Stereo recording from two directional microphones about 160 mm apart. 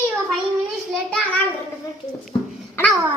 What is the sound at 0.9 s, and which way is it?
Speech, 5° left (ahead or behind).